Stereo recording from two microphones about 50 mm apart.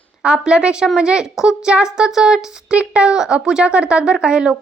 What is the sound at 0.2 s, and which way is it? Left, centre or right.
A woman's voice, centre.